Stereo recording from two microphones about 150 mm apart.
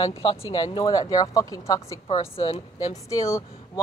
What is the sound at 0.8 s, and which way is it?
Speech, 25° left (ahead or behind).